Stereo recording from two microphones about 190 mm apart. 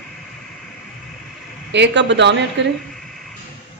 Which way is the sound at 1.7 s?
65° right (ahead or behind).